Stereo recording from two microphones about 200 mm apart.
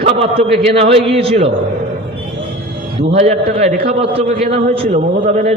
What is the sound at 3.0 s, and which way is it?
A man's voice, 35° right (ahead or behind).